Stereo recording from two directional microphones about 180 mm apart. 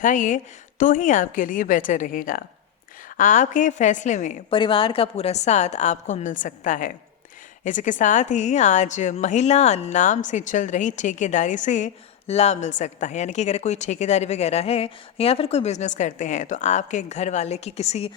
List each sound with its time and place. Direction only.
0.0 s a woman's voice: 45° left (ahead or behind)
4.4 s a woman's voice: 30° left (ahead or behind)